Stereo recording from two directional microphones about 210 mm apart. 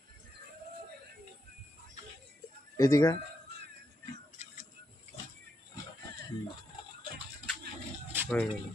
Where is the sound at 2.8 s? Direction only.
15° left (ahead or behind).